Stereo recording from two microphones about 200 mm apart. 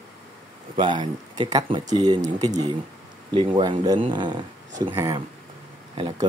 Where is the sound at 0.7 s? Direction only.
25° right (ahead or behind).